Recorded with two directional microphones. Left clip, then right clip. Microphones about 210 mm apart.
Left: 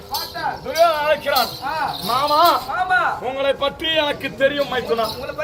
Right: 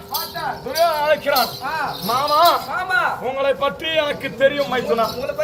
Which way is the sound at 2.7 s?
45° right (ahead or behind).